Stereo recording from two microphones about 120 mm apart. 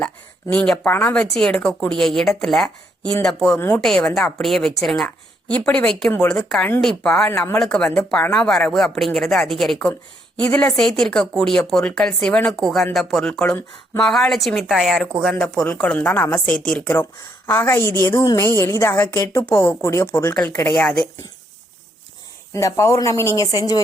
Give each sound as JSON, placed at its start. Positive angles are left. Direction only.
{"t": 0.5, "sound": "speech", "side_deg": 10}
{"t": 1.2, "sound": "a woman's voice", "side_deg": 5}
{"t": 20.7, "sound": "speech", "side_deg": 5}
{"t": 22.5, "sound": "a woman's voice", "side_deg": 25}